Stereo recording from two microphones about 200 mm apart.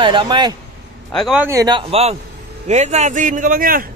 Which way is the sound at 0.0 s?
25° right (ahead or behind).